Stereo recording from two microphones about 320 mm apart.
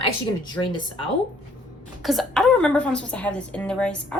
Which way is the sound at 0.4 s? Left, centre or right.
Centre.